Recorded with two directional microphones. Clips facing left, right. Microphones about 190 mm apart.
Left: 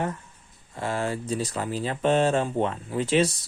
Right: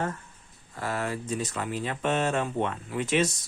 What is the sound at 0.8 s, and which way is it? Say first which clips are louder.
Speech: left 3 dB; 25° left (ahead or behind).